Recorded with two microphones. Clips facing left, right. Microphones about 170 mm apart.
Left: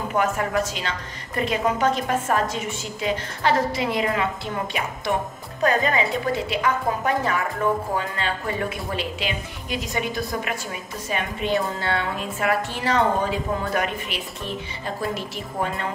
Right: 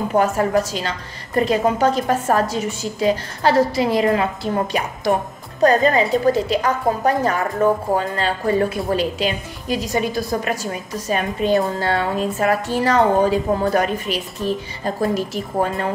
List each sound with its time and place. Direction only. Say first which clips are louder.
0.1 s a woman's voice: right 6 dB; 35° right (ahead or behind)